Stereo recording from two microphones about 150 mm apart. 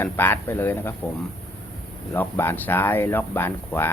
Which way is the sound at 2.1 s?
15° left (ahead or behind).